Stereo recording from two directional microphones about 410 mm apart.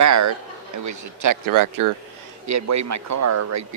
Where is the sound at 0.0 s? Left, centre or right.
Right.